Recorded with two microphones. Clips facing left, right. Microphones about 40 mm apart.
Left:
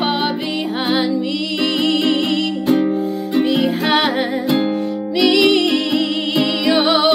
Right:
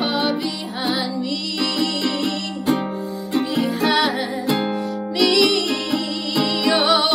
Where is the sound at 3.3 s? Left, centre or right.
Left.